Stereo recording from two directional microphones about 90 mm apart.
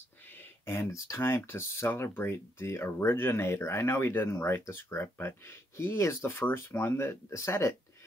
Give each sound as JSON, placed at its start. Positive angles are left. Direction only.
{"t": 0.7, "sound": "speech", "side_deg": 30}